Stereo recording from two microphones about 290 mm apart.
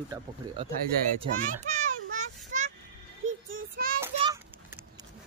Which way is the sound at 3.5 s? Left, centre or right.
Right.